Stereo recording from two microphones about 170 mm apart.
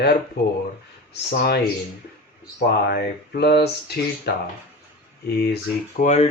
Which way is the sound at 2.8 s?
65° left (ahead or behind).